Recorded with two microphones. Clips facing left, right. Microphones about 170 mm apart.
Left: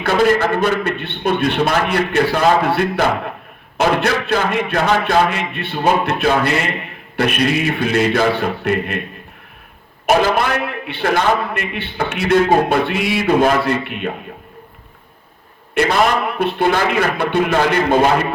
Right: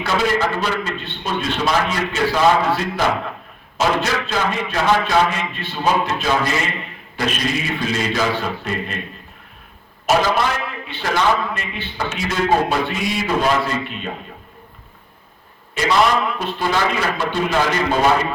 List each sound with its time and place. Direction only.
0.0 s a man's voice: 60° left (ahead or behind)
10.1 s a man's voice: 55° left (ahead or behind)
15.7 s a man's voice: 60° left (ahead or behind)